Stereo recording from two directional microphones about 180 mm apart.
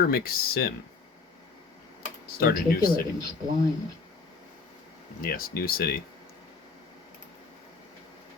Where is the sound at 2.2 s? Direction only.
55° left (ahead or behind).